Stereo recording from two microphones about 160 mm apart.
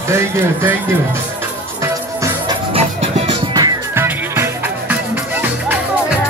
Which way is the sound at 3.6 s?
25° right (ahead or behind).